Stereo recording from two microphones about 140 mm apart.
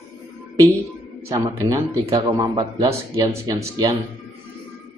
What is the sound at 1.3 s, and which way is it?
Speech, 25° right (ahead or behind).